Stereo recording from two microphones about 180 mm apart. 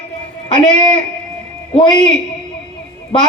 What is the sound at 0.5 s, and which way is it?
Speech, 40° right (ahead or behind).